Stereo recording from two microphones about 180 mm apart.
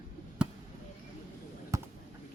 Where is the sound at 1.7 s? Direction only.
15° right (ahead or behind).